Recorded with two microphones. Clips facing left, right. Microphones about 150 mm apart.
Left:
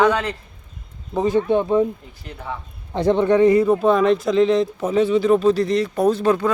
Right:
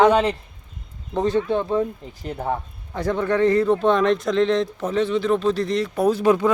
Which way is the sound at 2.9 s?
25° left (ahead or behind).